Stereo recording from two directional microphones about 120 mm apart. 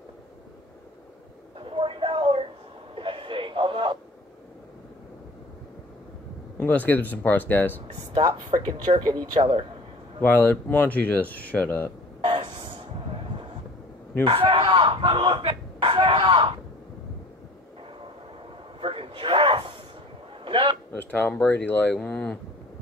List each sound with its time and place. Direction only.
1.6 s a sound: 45° right (ahead or behind)
6.6 s speech: 15° left (ahead or behind)
8.1 s speech: 35° right (ahead or behind)
9.4 s speech: 50° right (ahead or behind)
10.2 s speech: 15° left (ahead or behind)
12.3 s vehicle: 45° right (ahead or behind)
14.2 s speech: 45° right (ahead or behind)
18.8 s a sound: 45° right (ahead or behind)
20.9 s speech: 15° left (ahead or behind)